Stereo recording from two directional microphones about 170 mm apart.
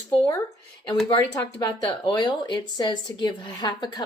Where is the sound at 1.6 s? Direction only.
25° left (ahead or behind).